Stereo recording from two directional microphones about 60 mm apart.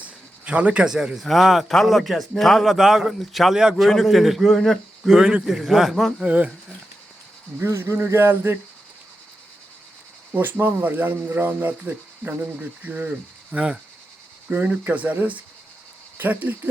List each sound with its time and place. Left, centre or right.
0.0 s a sound: right
0.9 s a man's voice: centre
5.1 s a man's voice: centre
6.1 s speech: right
7.6 s speech: right
10.3 s speech: right
14.5 s speech: right